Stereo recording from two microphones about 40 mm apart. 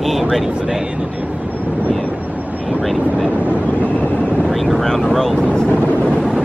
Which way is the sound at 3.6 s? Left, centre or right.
Left.